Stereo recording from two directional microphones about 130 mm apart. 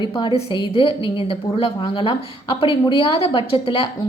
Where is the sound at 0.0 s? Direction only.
35° left (ahead or behind).